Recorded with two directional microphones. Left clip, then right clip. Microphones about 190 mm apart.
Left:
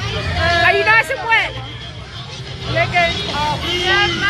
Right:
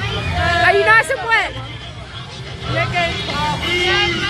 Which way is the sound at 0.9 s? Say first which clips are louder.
Right 1 dB; 30° right (ahead or behind).